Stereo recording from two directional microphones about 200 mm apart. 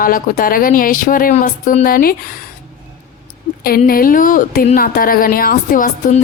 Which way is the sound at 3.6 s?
50° left (ahead or behind).